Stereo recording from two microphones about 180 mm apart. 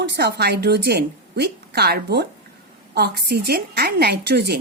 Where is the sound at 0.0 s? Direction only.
70° right (ahead or behind).